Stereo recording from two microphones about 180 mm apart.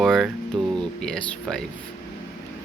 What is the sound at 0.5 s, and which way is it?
Speech, 25° right (ahead or behind).